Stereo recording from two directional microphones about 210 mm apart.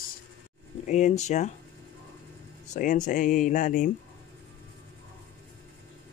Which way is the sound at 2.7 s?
40° left (ahead or behind).